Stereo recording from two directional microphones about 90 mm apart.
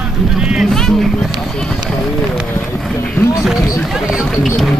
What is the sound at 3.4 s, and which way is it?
Run, centre (ahead or behind).